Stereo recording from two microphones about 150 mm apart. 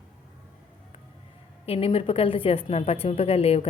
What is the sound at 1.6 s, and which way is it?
A woman's voice, 40° left (ahead or behind).